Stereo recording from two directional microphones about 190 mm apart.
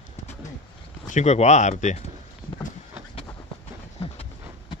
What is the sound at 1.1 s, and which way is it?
Speech, 35° left (ahead or behind).